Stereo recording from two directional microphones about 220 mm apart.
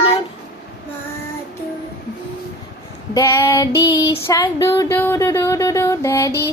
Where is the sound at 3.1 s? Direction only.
15° left (ahead or behind).